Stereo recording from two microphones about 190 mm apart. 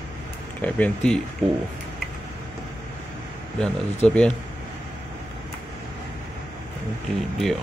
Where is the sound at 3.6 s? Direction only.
5° left (ahead or behind).